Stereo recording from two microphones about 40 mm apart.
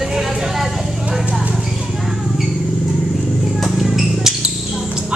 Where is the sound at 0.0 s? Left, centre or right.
Centre.